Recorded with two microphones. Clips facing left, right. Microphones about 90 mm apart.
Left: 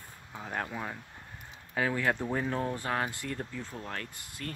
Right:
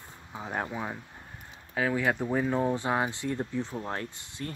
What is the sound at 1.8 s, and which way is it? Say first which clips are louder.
Speech: right 2 dB; 5° right (ahead or behind).